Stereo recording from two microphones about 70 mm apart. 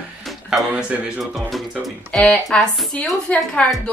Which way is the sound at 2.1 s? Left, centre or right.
Centre.